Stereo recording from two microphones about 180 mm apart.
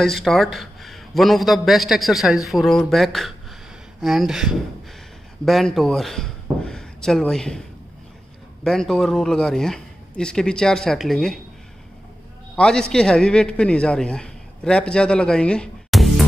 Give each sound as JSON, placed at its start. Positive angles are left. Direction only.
{"t": 0.0, "sound": "a man's voice", "side_deg": 0}
{"t": 8.6, "sound": "a man's voice", "side_deg": 0}
{"t": 12.5, "sound": "a man's voice", "side_deg": 5}